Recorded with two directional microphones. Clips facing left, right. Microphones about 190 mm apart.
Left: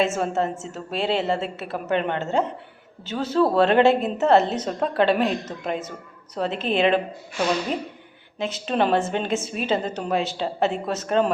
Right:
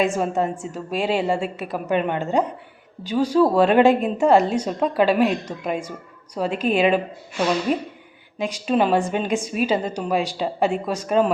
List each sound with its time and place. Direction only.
0.0 s a woman's voice: 15° right (ahead or behind)
8.4 s a woman's voice: 10° right (ahead or behind)